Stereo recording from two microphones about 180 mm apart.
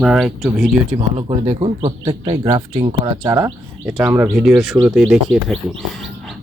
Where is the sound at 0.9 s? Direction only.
30° right (ahead or behind).